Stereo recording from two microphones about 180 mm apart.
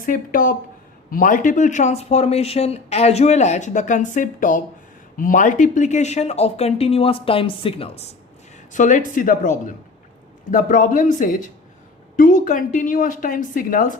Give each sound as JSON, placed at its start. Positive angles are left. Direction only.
{"t": 0.0, "sound": "speech", "side_deg": 50}
{"t": 8.7, "sound": "speech", "side_deg": 45}